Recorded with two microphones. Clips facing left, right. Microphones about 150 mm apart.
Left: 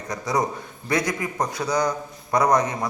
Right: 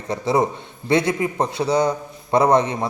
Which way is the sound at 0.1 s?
25° right (ahead or behind).